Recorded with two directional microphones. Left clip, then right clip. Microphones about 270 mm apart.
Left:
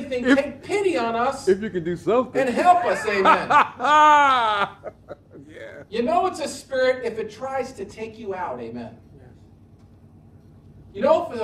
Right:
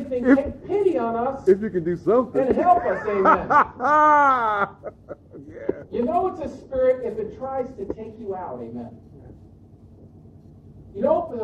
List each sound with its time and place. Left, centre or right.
0.2 s a woman's voice: left
11.0 s a woman's voice: left